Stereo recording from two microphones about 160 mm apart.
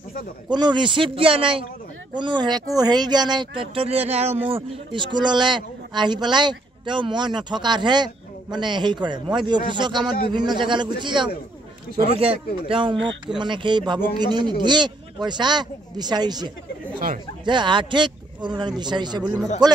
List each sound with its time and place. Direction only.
0.5 s a man's voice: 30° right (ahead or behind)